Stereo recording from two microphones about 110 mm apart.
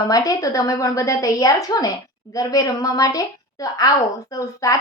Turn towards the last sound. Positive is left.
turn(degrees=30)  # may be behind; listen again after turning